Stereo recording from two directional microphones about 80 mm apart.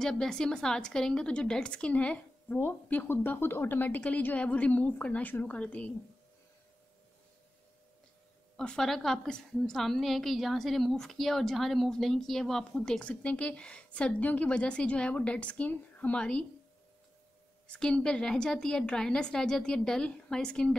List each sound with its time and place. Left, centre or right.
0.0 s a woman's voice: centre
8.5 s a woman's voice: centre
17.7 s a woman's voice: centre